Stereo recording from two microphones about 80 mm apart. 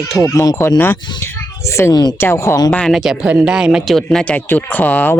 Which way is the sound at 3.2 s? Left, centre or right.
Centre.